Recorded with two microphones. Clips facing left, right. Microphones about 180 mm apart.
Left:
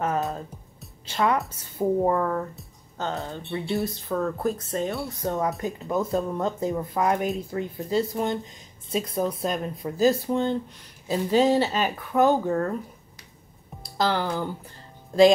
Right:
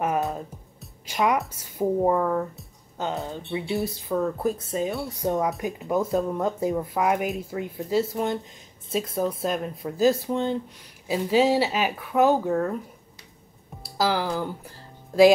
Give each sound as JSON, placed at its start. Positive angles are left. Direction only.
{"t": 0.0, "sound": "music", "side_deg": -15}
{"t": 1.0, "sound": "a woman's voice", "side_deg": -15}
{"t": 13.8, "sound": "speech", "side_deg": -5}